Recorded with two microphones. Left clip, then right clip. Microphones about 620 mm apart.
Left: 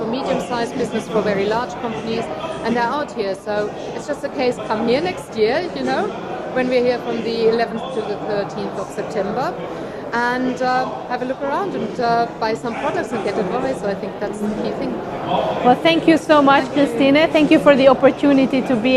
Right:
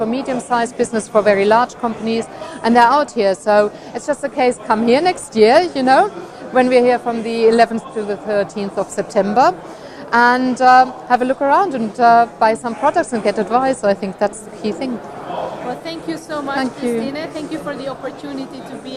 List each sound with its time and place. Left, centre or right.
0.1 s a woman's voice: right
9.2 s a woman's voice: right
15.8 s speech: left